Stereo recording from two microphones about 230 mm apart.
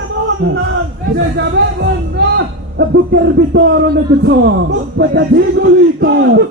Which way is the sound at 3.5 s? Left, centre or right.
Right.